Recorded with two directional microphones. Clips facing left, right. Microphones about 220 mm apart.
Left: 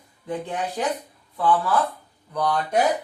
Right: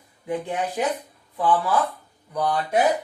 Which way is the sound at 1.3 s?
15° right (ahead or behind).